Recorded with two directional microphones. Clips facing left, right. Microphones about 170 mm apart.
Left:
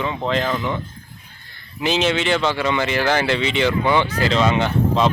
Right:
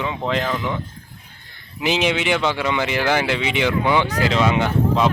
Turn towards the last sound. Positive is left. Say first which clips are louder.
# even
turn(degrees=-10)  # may be behind; listen again after turning